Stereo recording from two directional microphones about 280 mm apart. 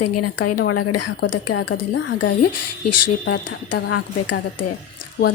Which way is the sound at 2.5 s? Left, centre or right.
Left.